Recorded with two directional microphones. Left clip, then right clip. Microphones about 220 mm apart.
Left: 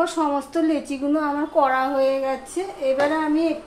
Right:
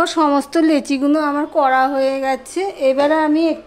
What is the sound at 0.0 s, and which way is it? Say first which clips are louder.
A woman's voice: right 6 dB; 50° right (ahead or behind).